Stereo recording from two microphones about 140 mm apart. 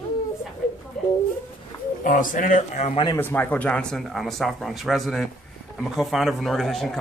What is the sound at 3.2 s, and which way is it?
Speech, 15° left (ahead or behind).